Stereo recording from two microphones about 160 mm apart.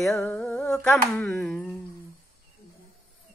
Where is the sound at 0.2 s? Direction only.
5° left (ahead or behind).